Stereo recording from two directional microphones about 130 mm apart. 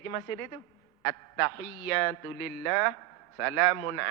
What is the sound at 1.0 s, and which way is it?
A man's voice, 20° left (ahead or behind).